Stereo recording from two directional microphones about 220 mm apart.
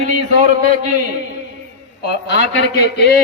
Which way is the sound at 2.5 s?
55° left (ahead or behind).